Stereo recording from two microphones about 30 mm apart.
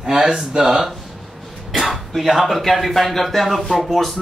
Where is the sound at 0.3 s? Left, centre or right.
Right.